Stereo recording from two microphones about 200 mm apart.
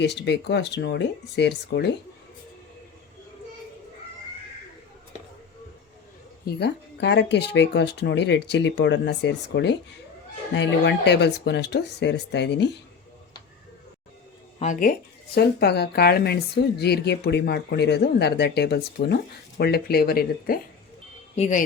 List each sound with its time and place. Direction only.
0.0 s speech: 60° left (ahead or behind)
6.4 s speech: 55° left (ahead or behind)
14.6 s speech: 40° left (ahead or behind)
15.4 s a woman's voice: 55° left (ahead or behind)
21.3 s speech: 35° left (ahead or behind)